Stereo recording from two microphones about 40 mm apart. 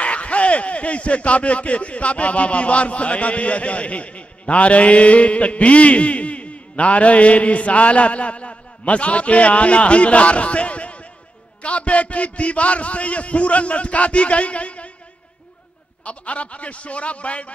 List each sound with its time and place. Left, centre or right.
0.0 s speech: left
16.0 s speech: left